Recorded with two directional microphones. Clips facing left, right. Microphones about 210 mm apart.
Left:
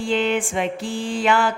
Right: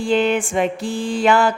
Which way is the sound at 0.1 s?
45° right (ahead or behind).